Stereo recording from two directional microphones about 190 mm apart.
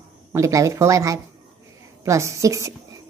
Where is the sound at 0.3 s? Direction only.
15° right (ahead or behind).